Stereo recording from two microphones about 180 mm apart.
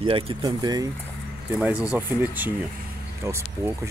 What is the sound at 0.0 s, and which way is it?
Speech, 30° right (ahead or behind).